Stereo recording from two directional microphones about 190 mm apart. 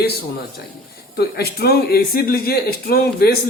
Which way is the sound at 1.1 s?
55° left (ahead or behind).